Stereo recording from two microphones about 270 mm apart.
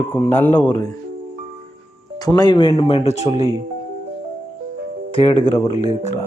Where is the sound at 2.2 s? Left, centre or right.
Centre.